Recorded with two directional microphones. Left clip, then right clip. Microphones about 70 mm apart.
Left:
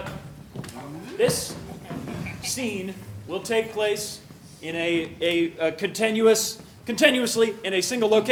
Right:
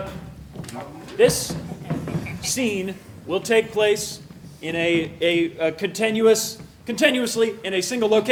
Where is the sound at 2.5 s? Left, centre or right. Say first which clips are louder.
Right 6 dB; right.